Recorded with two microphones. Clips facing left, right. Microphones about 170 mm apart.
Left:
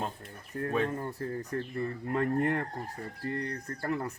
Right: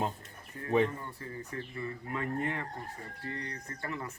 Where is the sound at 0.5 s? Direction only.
55° left (ahead or behind).